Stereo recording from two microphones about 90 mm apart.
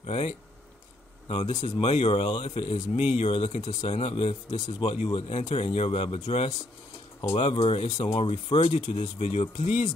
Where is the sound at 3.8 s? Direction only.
90° left.